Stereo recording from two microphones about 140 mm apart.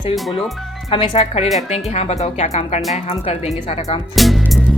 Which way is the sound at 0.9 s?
40° left (ahead or behind).